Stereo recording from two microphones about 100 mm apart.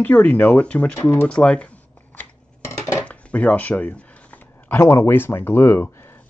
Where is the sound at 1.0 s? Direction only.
25° left (ahead or behind).